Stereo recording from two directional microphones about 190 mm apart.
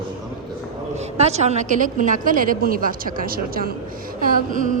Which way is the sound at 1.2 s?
35° right (ahead or behind).